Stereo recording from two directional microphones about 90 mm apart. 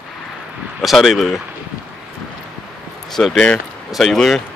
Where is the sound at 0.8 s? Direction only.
Centre (ahead or behind).